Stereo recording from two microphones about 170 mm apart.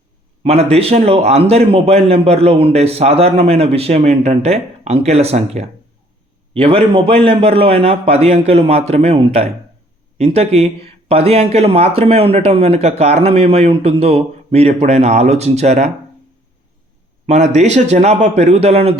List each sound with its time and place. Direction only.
0.4 s a man's voice: 35° right (ahead or behind)
17.2 s a man's voice: 40° right (ahead or behind)